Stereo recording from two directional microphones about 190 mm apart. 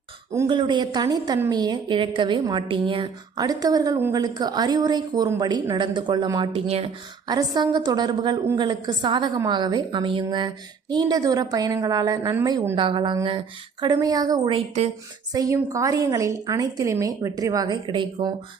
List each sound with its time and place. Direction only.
0.3 s a woman's voice: 25° right (ahead or behind)
7.3 s a woman's voice: 20° right (ahead or behind)